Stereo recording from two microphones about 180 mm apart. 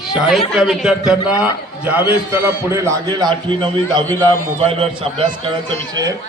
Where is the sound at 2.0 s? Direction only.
15° right (ahead or behind).